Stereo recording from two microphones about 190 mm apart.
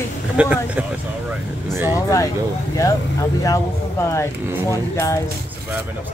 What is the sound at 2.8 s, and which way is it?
Speech, 15° left (ahead or behind).